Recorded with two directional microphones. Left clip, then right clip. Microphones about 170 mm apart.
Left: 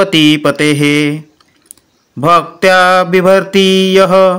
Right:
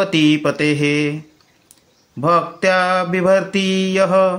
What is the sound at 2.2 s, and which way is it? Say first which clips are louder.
Mantra: left 7 dB; 35° left (ahead or behind).